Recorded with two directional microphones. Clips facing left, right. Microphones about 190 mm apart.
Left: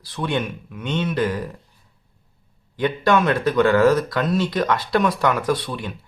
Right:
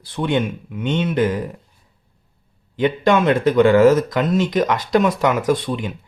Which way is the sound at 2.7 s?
20° right (ahead or behind).